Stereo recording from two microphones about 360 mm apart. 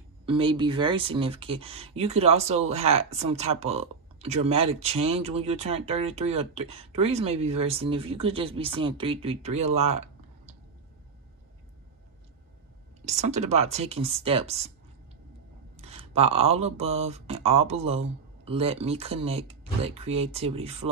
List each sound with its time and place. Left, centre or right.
0.2 s speech: centre
13.0 s speech: centre
15.7 s speech: centre